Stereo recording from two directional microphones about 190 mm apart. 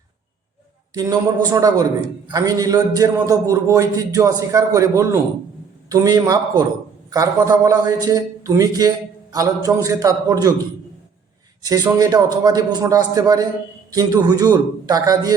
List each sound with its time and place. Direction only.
0.9 s a man's voice: 20° right (ahead or behind)
11.6 s a man's voice: 20° right (ahead or behind)